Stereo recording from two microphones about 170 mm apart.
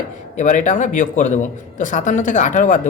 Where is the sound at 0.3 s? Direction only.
45° left (ahead or behind).